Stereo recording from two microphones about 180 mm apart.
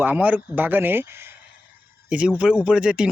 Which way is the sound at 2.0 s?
5° right (ahead or behind).